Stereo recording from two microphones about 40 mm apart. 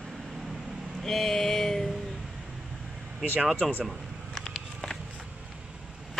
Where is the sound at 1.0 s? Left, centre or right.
Centre.